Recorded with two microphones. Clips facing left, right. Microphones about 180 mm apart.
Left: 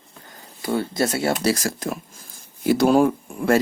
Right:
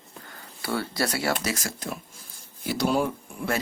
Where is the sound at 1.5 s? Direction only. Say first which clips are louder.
Left 7 dB; 45° left (ahead or behind).